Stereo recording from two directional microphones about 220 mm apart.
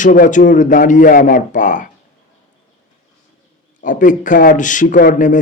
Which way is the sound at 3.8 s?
35° left (ahead or behind).